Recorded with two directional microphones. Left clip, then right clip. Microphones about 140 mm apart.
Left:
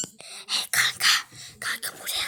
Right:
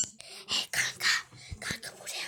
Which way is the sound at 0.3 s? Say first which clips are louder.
Left 5 dB; 5° right (ahead or behind).